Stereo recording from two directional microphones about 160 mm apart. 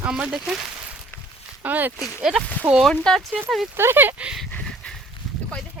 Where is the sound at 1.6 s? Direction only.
10° right (ahead or behind).